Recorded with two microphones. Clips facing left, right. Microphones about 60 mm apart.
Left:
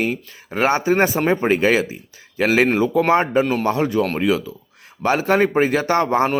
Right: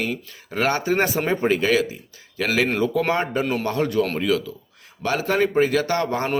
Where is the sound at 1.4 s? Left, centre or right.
Left.